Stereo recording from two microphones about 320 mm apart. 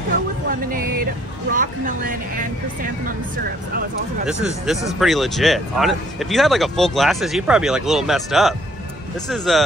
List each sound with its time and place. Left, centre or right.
0.5 s music: right
1.5 s speech: right
4.3 s speech: centre